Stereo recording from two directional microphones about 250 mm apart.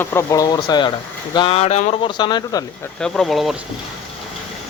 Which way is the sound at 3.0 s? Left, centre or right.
Centre.